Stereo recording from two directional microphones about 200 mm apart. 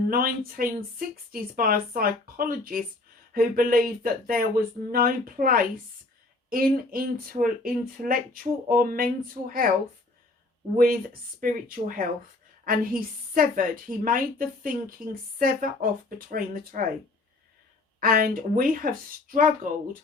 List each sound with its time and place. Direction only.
0.1 s a woman's voice: 45° right (ahead or behind)
10.8 s a woman's voice: 45° right (ahead or behind)
18.0 s a woman's voice: 45° right (ahead or behind)